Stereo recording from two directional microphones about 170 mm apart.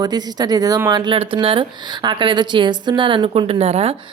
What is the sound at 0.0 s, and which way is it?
Speech, 25° right (ahead or behind).